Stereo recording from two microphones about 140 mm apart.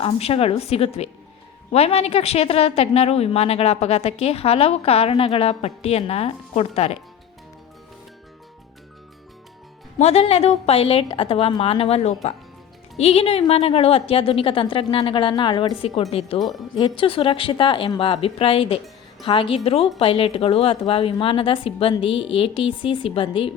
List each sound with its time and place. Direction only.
0.0 s a woman's voice: 45° left (ahead or behind)
10.0 s a woman's voice: 45° left (ahead or behind)